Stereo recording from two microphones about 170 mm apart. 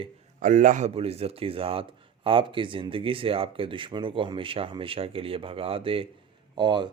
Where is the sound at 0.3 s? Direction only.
50° right (ahead or behind).